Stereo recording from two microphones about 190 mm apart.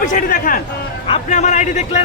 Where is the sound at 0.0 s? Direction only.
45° left (ahead or behind).